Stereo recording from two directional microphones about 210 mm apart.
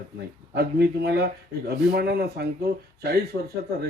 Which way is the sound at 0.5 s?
50° right (ahead or behind).